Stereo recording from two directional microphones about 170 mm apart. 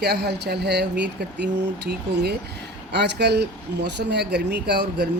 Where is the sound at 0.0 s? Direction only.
75° right (ahead or behind).